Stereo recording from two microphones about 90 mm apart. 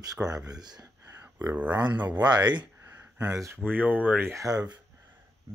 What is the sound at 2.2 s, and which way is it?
Speech, 55° right (ahead or behind).